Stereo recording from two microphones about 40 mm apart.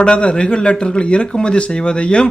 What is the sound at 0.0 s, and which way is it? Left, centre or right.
Speech, left.